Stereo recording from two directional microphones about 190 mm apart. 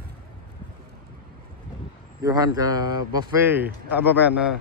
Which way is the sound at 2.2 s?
20° right (ahead or behind).